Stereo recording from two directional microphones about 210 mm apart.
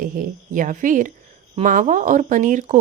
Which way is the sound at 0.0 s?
40° right (ahead or behind).